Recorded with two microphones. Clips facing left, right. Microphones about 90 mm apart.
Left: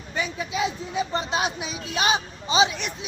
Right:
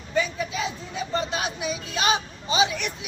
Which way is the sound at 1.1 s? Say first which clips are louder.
Right 3 dB; 20° left (ahead or behind).